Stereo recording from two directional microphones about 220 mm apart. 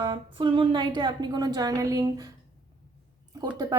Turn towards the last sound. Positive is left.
turn(degrees=-15)  # may be behind; listen again after turning